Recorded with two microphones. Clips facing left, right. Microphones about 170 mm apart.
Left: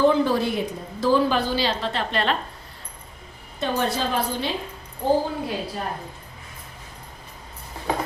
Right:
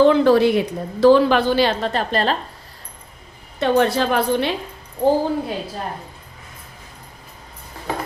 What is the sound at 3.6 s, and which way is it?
Speech, 70° right (ahead or behind).